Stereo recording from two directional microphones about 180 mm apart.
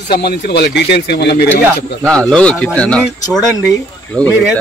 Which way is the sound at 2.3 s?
5° left (ahead or behind).